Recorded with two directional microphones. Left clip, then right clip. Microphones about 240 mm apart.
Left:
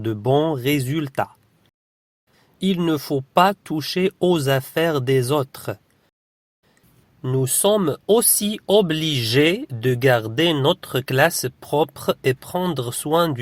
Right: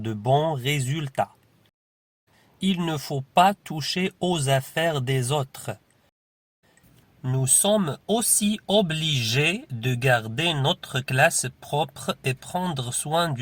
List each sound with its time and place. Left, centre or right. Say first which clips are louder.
0.0 s speech: left 3 dB; left
2.6 s speech: left 6 dB; left
7.3 s speech: left 4 dB; left